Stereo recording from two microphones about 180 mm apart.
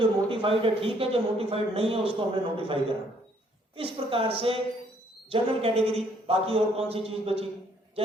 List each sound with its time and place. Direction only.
0.0 s a man's voice: 30° right (ahead or behind)
3.8 s a man's voice: 30° right (ahead or behind)